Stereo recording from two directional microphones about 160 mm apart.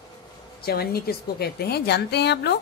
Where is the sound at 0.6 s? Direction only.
75° left (ahead or behind).